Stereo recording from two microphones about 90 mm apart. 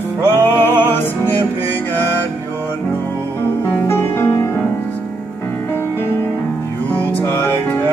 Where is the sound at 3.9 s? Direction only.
25° left (ahead or behind).